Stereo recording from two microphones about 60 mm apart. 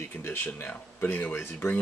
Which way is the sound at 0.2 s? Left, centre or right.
Left.